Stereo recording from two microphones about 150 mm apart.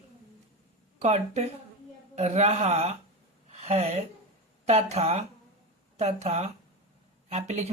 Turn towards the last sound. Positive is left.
turn(degrees=-45)  # may be behind; listen again after turning